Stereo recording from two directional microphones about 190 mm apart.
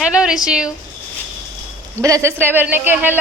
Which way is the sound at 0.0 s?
5° right (ahead or behind).